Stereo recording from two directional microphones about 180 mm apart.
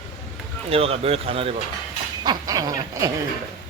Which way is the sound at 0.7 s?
35° right (ahead or behind).